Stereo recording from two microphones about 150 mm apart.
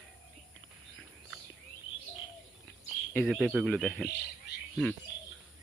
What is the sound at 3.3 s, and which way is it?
Speech, centre (ahead or behind).